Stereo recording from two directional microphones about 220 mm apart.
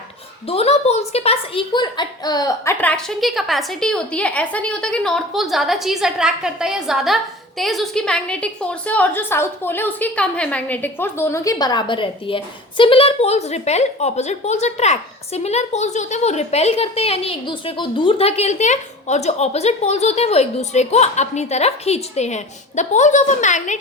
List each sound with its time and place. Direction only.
0.4 s a woman's voice: 25° left (ahead or behind)